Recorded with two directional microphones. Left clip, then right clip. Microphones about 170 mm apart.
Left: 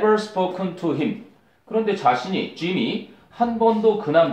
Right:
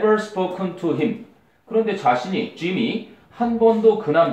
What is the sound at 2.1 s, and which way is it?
Speech, 40° left (ahead or behind).